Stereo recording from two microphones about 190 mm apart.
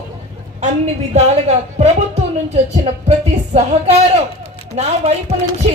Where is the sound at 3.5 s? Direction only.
35° right (ahead or behind).